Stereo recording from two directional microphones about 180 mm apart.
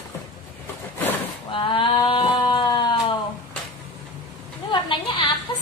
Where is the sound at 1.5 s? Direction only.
30° left (ahead or behind).